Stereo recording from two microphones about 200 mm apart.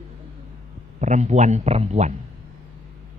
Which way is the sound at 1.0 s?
35° right (ahead or behind).